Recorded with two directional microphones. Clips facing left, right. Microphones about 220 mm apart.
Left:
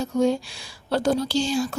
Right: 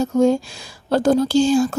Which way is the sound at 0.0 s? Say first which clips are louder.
Right 5 dB; 45° right (ahead or behind).